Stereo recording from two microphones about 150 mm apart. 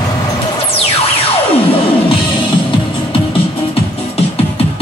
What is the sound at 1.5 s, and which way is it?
Music, 40° left (ahead or behind).